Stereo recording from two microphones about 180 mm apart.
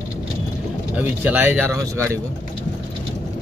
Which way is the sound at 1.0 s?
10° right (ahead or behind).